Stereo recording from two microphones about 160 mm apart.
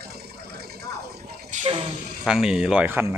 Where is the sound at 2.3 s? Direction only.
5° right (ahead or behind).